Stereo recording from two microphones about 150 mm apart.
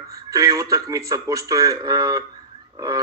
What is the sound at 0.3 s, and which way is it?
A man's voice, 20° right (ahead or behind).